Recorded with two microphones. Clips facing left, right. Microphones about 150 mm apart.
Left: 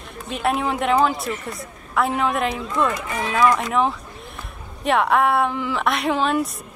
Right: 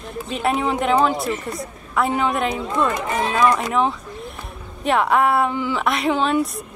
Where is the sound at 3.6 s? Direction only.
Centre (ahead or behind).